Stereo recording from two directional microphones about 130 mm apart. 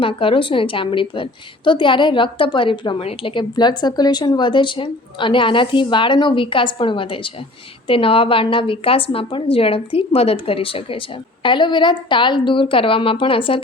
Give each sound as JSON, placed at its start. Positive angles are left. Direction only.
{"t": 0.0, "sound": "a woman's voice", "side_deg": 45}